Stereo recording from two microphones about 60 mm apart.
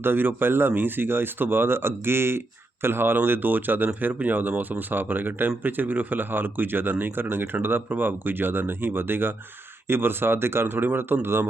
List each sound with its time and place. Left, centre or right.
0.0 s speech: right